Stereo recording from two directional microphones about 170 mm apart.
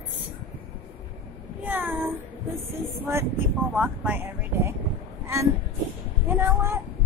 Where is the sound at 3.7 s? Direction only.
10° right (ahead or behind).